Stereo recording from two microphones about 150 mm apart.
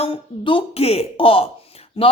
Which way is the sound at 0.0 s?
35° left (ahead or behind).